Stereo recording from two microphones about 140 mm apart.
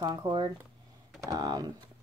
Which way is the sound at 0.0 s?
30° right (ahead or behind).